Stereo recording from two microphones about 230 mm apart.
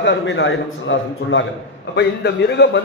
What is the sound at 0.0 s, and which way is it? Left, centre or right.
A man's voice, left.